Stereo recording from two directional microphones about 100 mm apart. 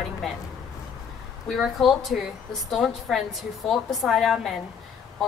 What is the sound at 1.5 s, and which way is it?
Speech, centre (ahead or behind).